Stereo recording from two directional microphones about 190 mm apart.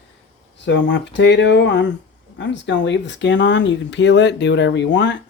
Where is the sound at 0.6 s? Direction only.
70° left (ahead or behind).